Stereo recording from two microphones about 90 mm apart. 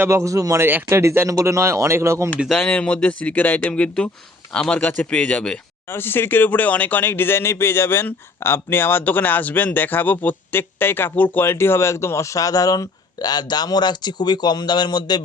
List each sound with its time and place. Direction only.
0.0 s speech: 35° right (ahead or behind)
0.6 s speech: 25° right (ahead or behind)
2.5 s speech: 15° left (ahead or behind)
5.9 s speech: 25° left (ahead or behind); by 15.2 s 50° left (ahead or behind)